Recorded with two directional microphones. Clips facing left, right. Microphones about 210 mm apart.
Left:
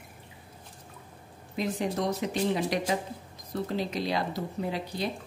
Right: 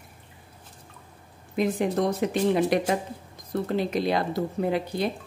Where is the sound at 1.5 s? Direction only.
55° right (ahead or behind).